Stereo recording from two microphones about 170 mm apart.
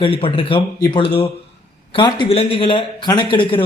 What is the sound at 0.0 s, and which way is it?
A man's voice, 30° left (ahead or behind).